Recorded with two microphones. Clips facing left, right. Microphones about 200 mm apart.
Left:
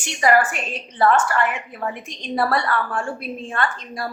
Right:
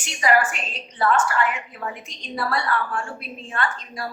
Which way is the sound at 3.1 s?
45° left (ahead or behind).